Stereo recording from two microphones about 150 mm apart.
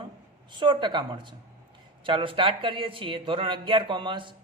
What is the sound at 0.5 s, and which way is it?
A man's voice, 30° right (ahead or behind).